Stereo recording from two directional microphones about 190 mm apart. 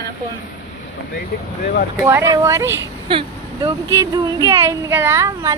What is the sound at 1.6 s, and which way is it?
Speech, 50° left (ahead or behind).